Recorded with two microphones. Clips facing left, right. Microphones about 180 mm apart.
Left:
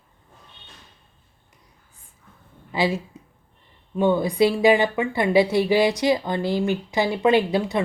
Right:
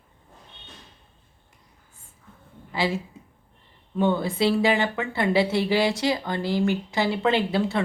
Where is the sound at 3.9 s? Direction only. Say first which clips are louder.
Left 4 dB; 15° left (ahead or behind).